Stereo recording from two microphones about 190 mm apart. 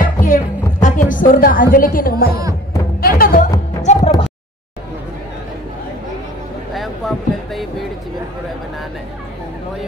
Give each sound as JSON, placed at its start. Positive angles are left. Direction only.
{"t": 0.0, "sound": "music", "side_deg": 45}
{"t": 3.8, "sound": "music", "side_deg": 35}
{"t": 6.7, "sound": "music", "side_deg": 0}